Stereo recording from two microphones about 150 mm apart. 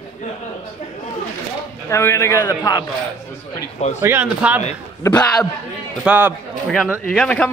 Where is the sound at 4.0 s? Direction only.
15° right (ahead or behind).